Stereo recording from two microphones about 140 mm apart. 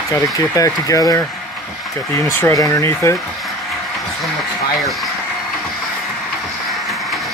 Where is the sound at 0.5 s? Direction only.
25° left (ahead or behind).